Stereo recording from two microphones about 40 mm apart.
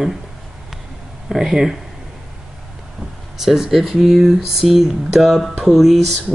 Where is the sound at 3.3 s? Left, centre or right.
Centre.